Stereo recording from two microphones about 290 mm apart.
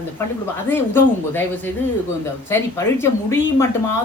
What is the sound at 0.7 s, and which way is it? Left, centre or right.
Speech, centre.